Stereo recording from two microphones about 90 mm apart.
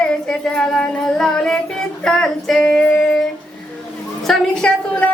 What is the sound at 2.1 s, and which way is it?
Female singing, 5° left (ahead or behind).